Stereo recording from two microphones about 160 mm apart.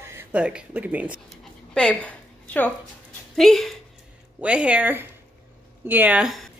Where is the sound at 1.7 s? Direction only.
5° left (ahead or behind).